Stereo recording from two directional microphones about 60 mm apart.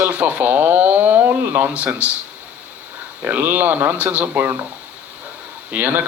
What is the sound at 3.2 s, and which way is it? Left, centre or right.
Speech, right.